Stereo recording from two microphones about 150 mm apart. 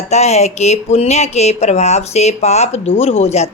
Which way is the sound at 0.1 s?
45° left (ahead or behind).